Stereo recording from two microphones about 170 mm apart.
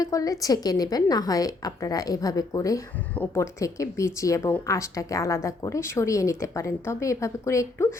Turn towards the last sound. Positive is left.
turn(degrees=15)  # may be behind; listen again after turning